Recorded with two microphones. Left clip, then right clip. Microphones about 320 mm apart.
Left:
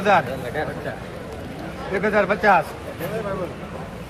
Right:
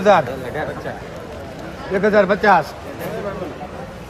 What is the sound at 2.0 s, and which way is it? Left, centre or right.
Speech, right.